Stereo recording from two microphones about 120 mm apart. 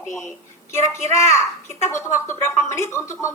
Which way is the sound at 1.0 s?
25° left (ahead or behind).